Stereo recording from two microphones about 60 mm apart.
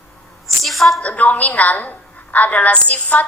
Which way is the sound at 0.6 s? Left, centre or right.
Centre.